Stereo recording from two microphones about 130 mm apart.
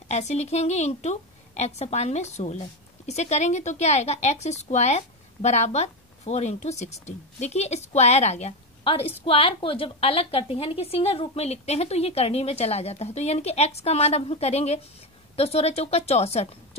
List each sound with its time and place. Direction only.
0.1 s a woman's voice: 60° left (ahead or behind)